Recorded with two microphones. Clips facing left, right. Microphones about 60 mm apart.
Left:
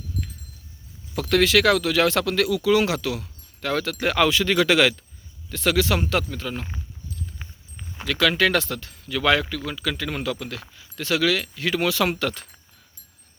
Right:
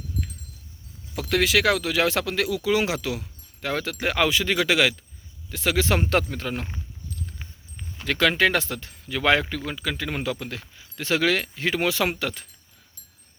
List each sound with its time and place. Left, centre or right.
1.1 s speech: centre
5.8 s speech: right
7.4 s a sound: centre
8.0 s speech: right; by 12.5 s centre